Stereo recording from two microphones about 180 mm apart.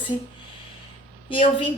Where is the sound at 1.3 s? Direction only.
30° left (ahead or behind).